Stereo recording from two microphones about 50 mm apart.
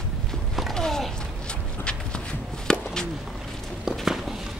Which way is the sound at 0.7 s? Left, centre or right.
Centre.